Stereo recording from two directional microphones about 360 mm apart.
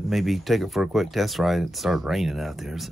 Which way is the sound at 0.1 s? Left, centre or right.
Centre.